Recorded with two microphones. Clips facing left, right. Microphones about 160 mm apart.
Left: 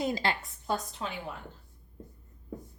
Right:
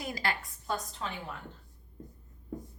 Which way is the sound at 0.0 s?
25° left (ahead or behind).